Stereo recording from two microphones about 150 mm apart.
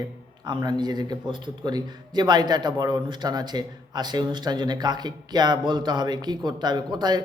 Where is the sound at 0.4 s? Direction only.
30° right (ahead or behind).